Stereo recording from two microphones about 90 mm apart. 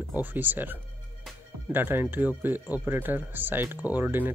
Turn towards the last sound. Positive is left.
turn(degrees=-20)  # may be behind; listen again after turning